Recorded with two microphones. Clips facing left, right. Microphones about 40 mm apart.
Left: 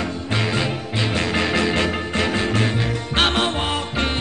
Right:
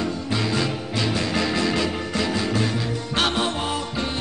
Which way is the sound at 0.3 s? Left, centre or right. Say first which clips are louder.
Left 3 dB; left.